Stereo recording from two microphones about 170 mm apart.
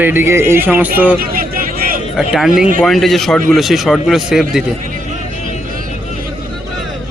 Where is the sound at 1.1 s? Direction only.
60° right (ahead or behind).